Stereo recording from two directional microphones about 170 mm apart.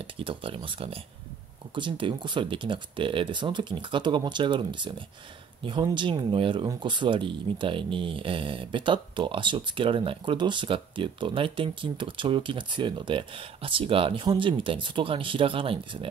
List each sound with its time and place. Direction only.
0.0 s speech: 30° right (ahead or behind)